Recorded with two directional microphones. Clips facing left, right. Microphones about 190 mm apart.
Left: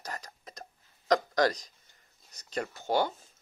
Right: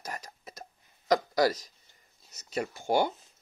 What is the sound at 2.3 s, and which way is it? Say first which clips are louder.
Speech: right 2 dB; 10° right (ahead or behind).